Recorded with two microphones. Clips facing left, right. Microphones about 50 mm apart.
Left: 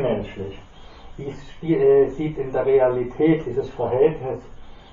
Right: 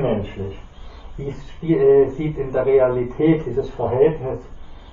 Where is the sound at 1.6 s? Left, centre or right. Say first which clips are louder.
Right 2 dB; right.